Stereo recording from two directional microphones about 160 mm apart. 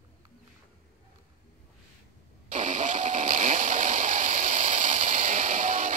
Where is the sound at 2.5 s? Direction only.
50° right (ahead or behind).